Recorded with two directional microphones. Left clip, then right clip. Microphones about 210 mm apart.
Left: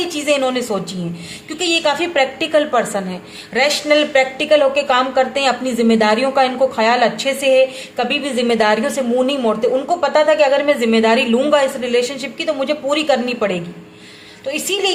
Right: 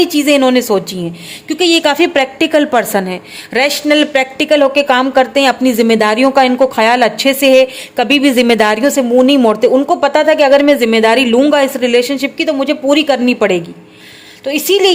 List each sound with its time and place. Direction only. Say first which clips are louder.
0.0 s a woman's voice: right 7 dB; 40° right (ahead or behind)